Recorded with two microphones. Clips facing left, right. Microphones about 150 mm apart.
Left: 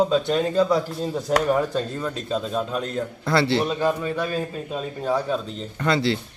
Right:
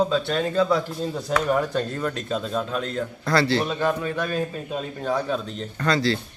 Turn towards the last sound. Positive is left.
turn(degrees=20)  # may be behind; listen again after turning